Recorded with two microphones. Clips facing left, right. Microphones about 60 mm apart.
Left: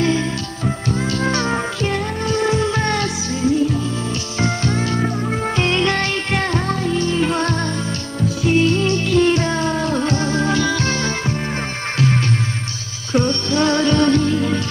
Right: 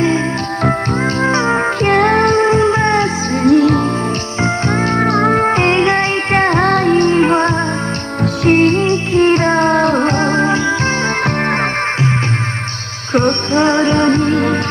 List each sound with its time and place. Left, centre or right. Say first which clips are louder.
1.2 s music: right 6 dB; right
1.8 s music: right 11 dB; right
2.3 s music: right 7 dB; right
3.4 s music: right 8 dB; right
4.4 s music: right 4 dB; right
5.0 s music: right 9 dB; right
5.4 s music: right 6 dB; right
6.6 s music: right 9 dB; right
8.2 s music: right 5 dB; right
8.8 s music: right 4 dB; right
9.3 s music: right 7 dB; right
13.1 s music: right 4 dB; right
13.6 s music: right 3 dB; right
14.3 s music: right 5 dB; right